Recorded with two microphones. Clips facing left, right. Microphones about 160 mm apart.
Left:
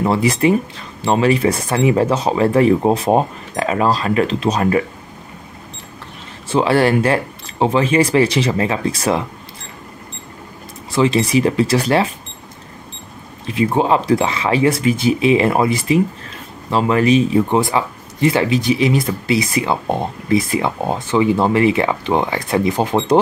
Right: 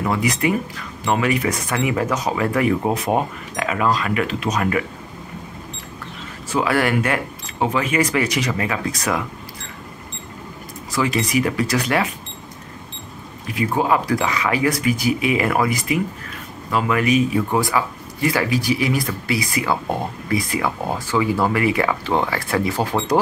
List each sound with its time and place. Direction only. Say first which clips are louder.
0.0 s speech: left 5 dB; 30° left (ahead or behind)
6.5 s speech: left 5 dB; 30° left (ahead or behind)
10.9 s speech: left 6 dB; 25° left (ahead or behind)
13.5 s speech: left 4 dB; 25° left (ahead or behind)